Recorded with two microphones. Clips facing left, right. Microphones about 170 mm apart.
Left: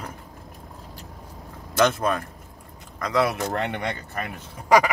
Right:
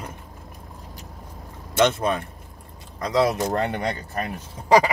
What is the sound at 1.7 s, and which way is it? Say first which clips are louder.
Speech: right 1 dB; 25° right (ahead or behind).